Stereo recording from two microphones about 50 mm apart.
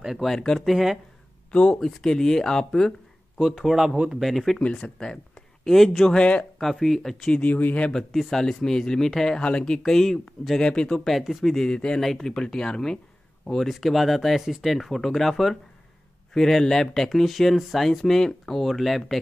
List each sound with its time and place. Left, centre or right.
0.0 s speech: centre
0.3 s speech: centre
0.6 s speech: centre
1.5 s speech: centre
3.3 s speech: centre
4.2 s speech: centre
4.6 s speech: left; by 6.1 s centre
6.1 s speech: left
6.6 s speech: centre
7.3 s speech: left
7.9 s speech: centre
9.4 s speech: left
10.6 s speech: centre
11.1 s speech: centre